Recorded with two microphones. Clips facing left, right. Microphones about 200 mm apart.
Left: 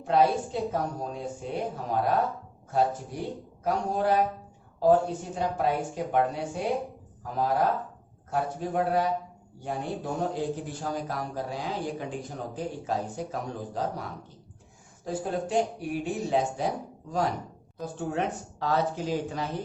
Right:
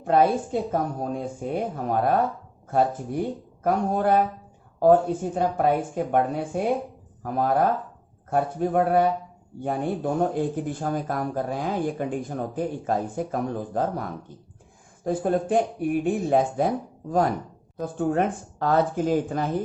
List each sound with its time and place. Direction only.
0.0 s speech: 55° right (ahead or behind)